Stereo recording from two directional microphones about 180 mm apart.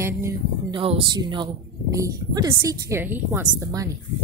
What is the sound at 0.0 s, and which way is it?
Speech, 15° right (ahead or behind).